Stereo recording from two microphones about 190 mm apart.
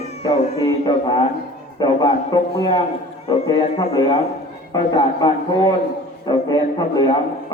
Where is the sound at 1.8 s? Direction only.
20° left (ahead or behind).